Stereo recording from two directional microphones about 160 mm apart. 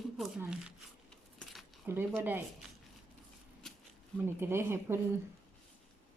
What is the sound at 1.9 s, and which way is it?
Speech, 15° right (ahead or behind).